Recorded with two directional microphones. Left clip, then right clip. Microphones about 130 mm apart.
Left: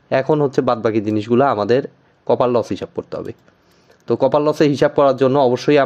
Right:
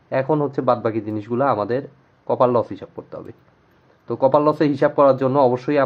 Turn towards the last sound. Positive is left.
turn(degrees=40)  # may be behind; listen again after turning